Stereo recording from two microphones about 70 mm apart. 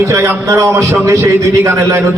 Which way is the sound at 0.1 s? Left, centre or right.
Right.